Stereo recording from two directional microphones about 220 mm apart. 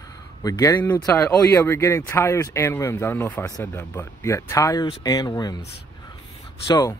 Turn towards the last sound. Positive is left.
turn(degrees=20)  # may be behind; listen again after turning